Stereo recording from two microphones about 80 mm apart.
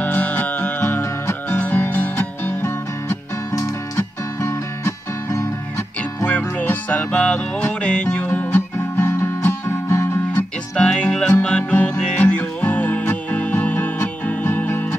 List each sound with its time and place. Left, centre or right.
0.0 s music: centre
3.5 s music: left
6.2 s music: left
8.7 s music: left
10.8 s music: centre